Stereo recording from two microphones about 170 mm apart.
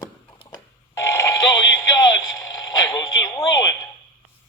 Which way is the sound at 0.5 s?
15° left (ahead or behind).